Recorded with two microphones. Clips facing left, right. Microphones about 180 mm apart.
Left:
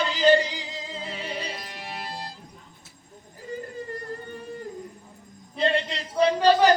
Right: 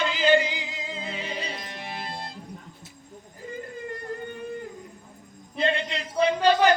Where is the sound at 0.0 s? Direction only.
35° left (ahead or behind).